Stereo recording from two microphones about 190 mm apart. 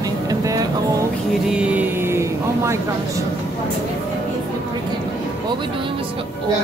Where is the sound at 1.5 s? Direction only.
5° right (ahead or behind).